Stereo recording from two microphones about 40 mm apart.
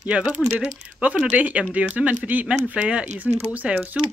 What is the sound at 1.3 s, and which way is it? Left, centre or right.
Speech, right.